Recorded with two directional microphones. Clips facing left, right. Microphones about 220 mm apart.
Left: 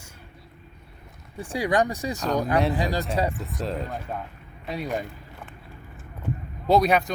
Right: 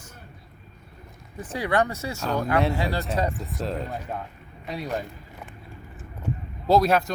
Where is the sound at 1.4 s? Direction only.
15° left (ahead or behind).